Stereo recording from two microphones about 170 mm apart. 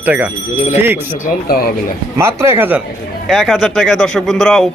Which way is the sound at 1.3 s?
60° left (ahead or behind).